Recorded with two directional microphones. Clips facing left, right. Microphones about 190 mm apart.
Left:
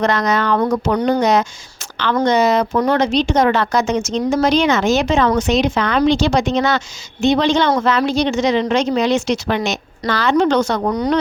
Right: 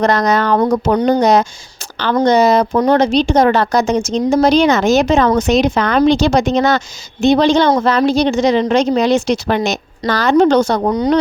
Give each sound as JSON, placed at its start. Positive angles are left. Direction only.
{"t": 0.0, "sound": "a woman's voice", "side_deg": -40}